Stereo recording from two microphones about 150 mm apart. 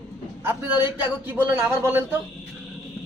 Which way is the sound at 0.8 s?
15° right (ahead or behind).